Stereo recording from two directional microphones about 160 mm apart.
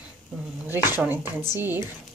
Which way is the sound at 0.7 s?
15° right (ahead or behind).